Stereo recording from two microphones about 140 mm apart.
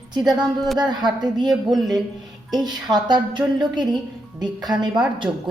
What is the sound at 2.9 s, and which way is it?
A woman's voice, 30° right (ahead or behind).